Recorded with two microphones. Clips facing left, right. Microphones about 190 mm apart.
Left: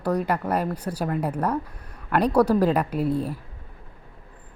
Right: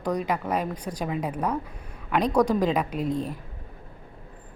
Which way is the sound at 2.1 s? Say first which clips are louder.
Left 3 dB; 5° left (ahead or behind).